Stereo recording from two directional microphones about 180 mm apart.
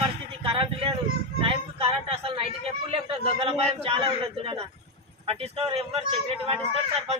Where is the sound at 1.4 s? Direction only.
30° right (ahead or behind).